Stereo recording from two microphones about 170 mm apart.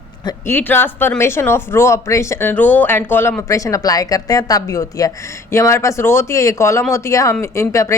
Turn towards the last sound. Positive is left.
turn(degrees=20)  # may be behind; listen again after turning